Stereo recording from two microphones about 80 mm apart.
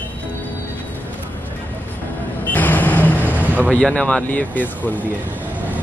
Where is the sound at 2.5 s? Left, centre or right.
Left.